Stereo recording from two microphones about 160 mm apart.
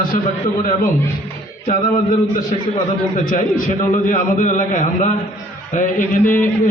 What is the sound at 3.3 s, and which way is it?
A man's voice, 55° left (ahead or behind).